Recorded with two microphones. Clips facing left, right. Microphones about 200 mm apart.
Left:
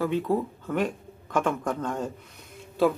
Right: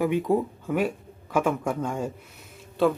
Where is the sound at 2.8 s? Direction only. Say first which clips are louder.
Right 1 dB; centre (ahead or behind).